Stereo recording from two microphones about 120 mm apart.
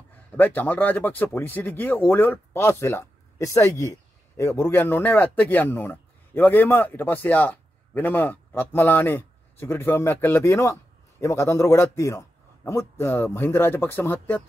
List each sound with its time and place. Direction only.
0.4 s speech: 15° left (ahead or behind)